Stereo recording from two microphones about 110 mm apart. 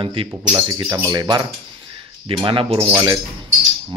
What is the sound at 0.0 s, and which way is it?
Speech, 50° right (ahead or behind).